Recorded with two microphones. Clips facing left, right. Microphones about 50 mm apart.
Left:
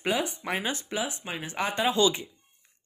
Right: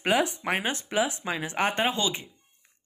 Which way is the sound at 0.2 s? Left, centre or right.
Right.